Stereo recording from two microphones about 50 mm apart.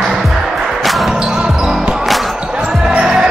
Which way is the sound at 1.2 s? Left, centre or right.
Centre.